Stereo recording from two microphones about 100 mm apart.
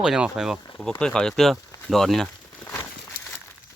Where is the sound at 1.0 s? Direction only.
5° left (ahead or behind).